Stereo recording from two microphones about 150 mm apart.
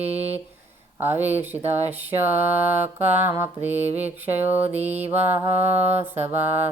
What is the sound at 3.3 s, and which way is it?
Mantra, 15° right (ahead or behind).